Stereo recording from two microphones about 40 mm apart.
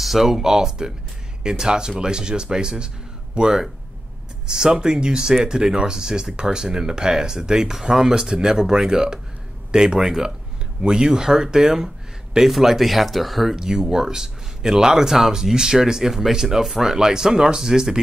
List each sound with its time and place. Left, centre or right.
0.0 s speech: centre
13.6 s speech: centre